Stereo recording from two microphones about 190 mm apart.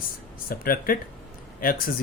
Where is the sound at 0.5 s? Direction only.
50° left (ahead or behind).